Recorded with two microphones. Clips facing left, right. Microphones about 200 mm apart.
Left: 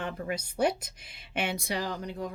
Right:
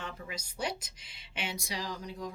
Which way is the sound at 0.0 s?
60° left (ahead or behind).